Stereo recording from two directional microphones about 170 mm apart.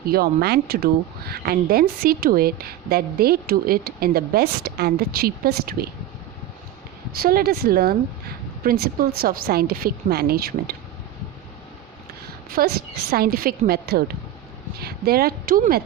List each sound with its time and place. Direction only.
0.0 s a woman's voice: 65° right (ahead or behind)
7.2 s a woman's voice: 60° right (ahead or behind)
12.5 s a woman's voice: 65° right (ahead or behind)